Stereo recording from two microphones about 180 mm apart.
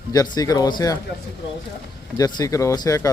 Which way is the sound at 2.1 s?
20° left (ahead or behind).